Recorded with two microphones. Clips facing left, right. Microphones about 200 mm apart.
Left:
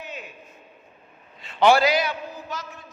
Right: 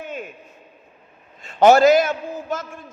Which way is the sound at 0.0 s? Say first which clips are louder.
Right 6 dB; 50° right (ahead or behind).